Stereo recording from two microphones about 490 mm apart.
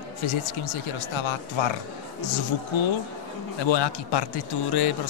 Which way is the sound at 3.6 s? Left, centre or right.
Left.